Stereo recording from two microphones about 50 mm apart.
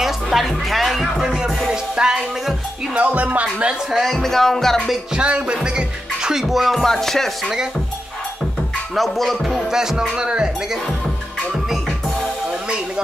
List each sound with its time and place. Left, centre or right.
0.0 s speech: centre
1.7 s music: centre
2.9 s speech: right
3.9 s speech: centre
5.1 s music: centre
6.4 s speech: centre
8.9 s speech: centre
10.1 s music: centre